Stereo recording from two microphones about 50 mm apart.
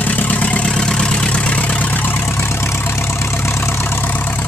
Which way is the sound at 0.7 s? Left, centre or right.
Centre.